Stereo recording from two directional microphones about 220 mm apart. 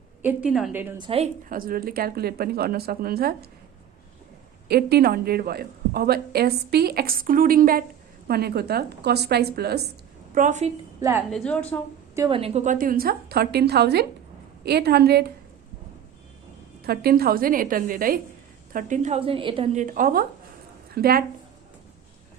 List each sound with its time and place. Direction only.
0.2 s a woman's voice: 5° right (ahead or behind)
0.9 s a woman's voice: 25° right (ahead or behind)
1.5 s a woman's voice: 40° right (ahead or behind)
4.7 s a woman's voice: 45° right (ahead or behind)
10.3 s a woman's voice: 35° right (ahead or behind)
11.3 s a woman's voice: 5° left (ahead or behind)
12.1 s a woman's voice: 15° right (ahead or behind)
12.4 s a woman's voice: 30° right (ahead or behind); by 15.2 s 45° right (ahead or behind)
16.8 s a woman's voice: 45° right (ahead or behind)